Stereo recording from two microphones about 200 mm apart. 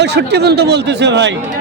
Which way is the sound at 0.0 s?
55° right (ahead or behind).